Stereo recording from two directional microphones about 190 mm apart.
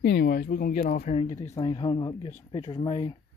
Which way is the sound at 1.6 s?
25° left (ahead or behind).